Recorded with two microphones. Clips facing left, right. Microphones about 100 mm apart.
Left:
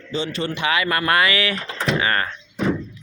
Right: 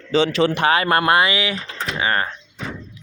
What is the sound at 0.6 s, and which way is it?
Speech, 40° right (ahead or behind).